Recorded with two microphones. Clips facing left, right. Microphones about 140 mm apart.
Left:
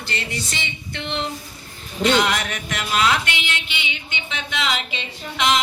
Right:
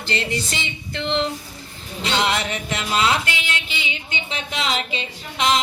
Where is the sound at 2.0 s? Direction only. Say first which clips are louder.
Left 3 dB; 25° right (ahead or behind).